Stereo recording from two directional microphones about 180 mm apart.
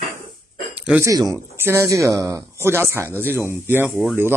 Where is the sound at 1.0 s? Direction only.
20° right (ahead or behind).